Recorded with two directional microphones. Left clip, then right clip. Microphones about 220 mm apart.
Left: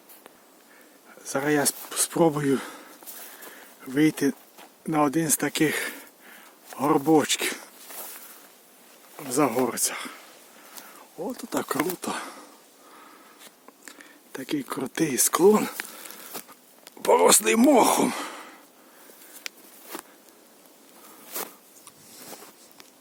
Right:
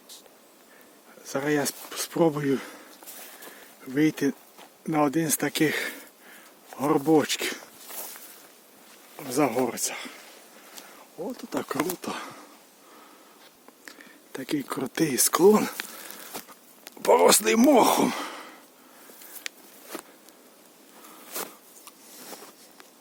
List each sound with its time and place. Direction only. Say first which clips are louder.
1.2 s speech: left 2 dB; 10° left (ahead or behind)
3.1 s a sound: right 1 dB; centre (ahead or behind)
3.9 s speech: left 2 dB; 15° left (ahead or behind)
6.7 s walk: left 1 dB; 10° left (ahead or behind)
7.9 s walk: right 2 dB; 5° right (ahead or behind)
9.1 s speech: left 1 dB; 10° left (ahead or behind)
11.2 s speech: left 2 dB; 15° left (ahead or behind)
13.8 s speech: right 1 dB; 5° left (ahead or behind)
15.8 s a sound: even; centre (ahead or behind)
17.0 s speech: even; centre (ahead or behind)
19.4 s a sound: even; 10° left (ahead or behind)
21.2 s a sound: even; centre (ahead or behind)